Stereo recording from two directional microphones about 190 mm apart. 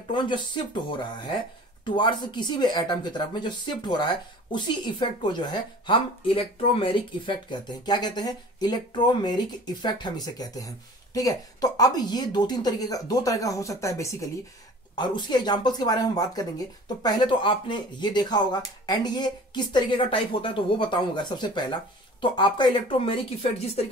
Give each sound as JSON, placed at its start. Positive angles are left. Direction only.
{"t": 0.1, "sound": "a woman's voice", "side_deg": 25}